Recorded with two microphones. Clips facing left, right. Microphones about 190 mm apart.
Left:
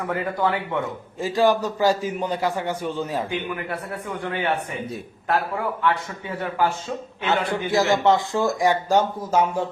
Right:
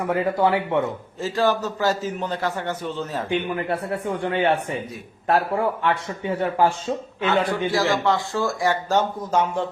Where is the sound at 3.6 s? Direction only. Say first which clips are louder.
Right 5 dB; 25° right (ahead or behind).